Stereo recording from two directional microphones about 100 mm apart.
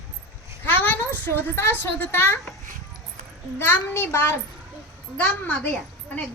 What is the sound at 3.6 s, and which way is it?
Speech, 25° left (ahead or behind).